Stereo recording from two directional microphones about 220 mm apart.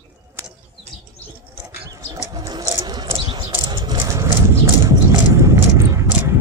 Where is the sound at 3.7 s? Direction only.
15° right (ahead or behind).